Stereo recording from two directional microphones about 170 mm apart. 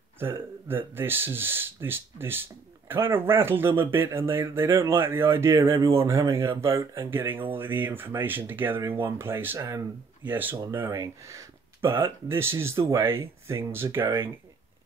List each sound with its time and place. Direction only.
0.2 s speech: 15° right (ahead or behind)